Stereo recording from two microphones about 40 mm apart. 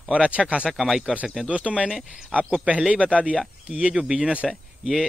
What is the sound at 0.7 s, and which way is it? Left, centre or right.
Speech, centre.